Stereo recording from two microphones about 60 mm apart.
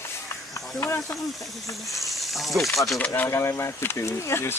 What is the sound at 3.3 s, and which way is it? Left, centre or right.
Speech, left.